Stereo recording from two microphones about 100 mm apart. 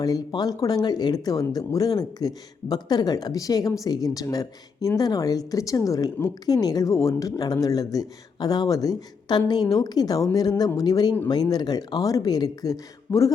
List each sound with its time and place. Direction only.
0.0 s speech: 40° left (ahead or behind)